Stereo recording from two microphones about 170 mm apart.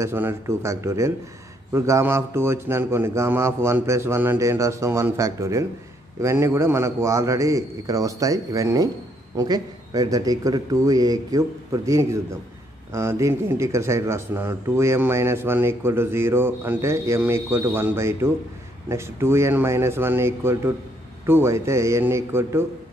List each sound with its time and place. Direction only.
0.0 s a man's voice: 15° right (ahead or behind)